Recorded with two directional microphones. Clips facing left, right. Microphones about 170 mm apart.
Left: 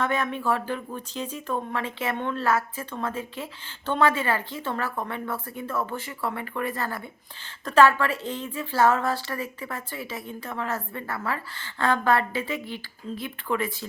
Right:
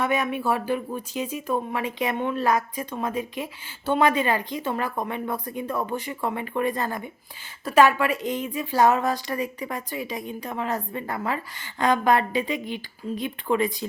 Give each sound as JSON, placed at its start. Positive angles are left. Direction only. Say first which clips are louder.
{"t": 0.0, "sound": "a woman's voice", "louder": "right 2 dB", "side_deg": -10}